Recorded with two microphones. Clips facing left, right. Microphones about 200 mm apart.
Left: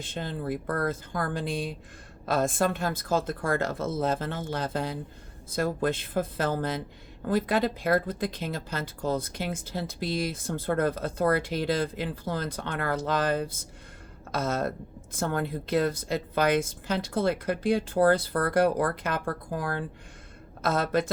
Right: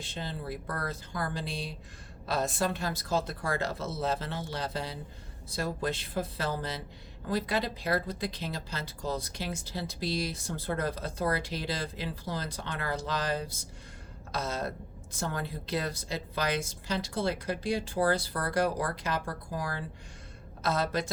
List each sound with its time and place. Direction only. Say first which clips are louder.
0.0 s a woman's voice: left 5 dB; 50° left (ahead or behind)